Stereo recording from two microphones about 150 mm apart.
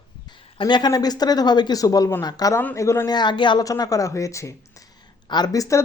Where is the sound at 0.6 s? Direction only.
30° left (ahead or behind).